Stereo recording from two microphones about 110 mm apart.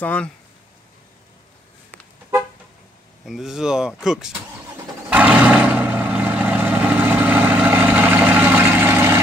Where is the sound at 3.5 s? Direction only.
5° right (ahead or behind).